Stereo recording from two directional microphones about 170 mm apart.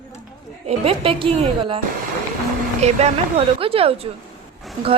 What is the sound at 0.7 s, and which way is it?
A woman's voice, 35° right (ahead or behind).